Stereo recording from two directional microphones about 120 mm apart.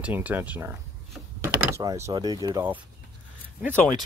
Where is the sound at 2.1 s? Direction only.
35° right (ahead or behind).